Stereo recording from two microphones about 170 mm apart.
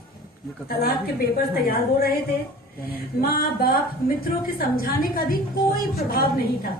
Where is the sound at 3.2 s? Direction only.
60° left (ahead or behind).